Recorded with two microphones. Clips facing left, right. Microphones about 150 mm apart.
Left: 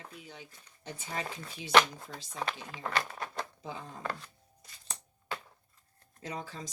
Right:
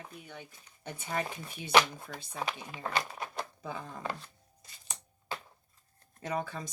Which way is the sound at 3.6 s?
60° right (ahead or behind).